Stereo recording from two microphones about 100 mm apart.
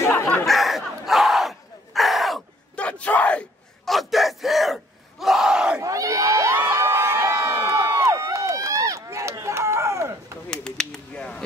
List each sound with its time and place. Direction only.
0.0 s chatter: 25° left (ahead or behind)
0.5 s battle cry: centre (ahead or behind)
2.7 s bellow: 10° left (ahead or behind)
3.8 s battle cry: centre (ahead or behind)
5.2 s crowd: 5° right (ahead or behind)
5.8 s crowd: 35° right (ahead or behind)
10.5 s a sound: 5° left (ahead or behind)